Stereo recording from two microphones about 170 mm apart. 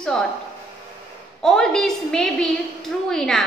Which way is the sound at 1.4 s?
5° left (ahead or behind).